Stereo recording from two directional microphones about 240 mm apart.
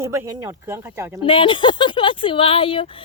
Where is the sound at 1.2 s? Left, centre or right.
Left.